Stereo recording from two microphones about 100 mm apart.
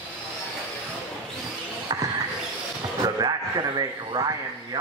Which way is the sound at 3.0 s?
40° right (ahead or behind).